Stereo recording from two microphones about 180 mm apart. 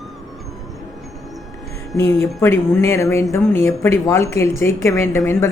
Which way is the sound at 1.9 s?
15° left (ahead or behind).